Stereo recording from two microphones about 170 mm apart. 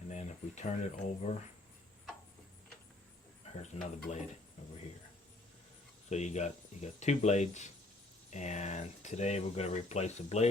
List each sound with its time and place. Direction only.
0.1 s speech: 45° left (ahead or behind)
3.4 s speech: 40° left (ahead or behind)
6.1 s speech: 40° left (ahead or behind)